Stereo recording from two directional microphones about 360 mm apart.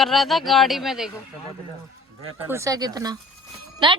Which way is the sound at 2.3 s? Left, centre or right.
Centre.